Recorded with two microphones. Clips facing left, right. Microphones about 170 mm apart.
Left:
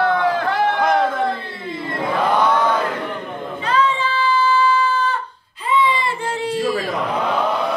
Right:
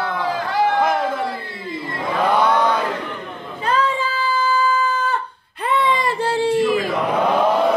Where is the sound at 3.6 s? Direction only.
45° right (ahead or behind).